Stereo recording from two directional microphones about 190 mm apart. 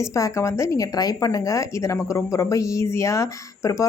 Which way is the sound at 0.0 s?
15° left (ahead or behind).